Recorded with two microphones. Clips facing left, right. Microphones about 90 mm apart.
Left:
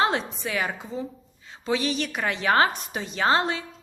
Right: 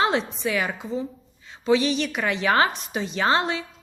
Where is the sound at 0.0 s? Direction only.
45° left (ahead or behind).